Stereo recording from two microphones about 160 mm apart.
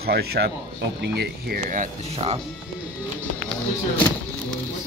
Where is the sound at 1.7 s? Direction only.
45° right (ahead or behind).